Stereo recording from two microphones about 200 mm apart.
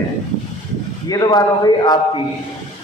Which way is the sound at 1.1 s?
20° left (ahead or behind).